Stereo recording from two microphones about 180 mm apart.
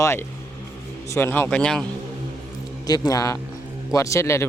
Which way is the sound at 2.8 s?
20° left (ahead or behind).